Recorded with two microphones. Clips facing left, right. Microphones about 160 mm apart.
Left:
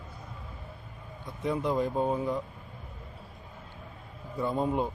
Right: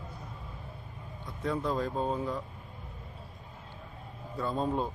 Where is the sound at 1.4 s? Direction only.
15° left (ahead or behind).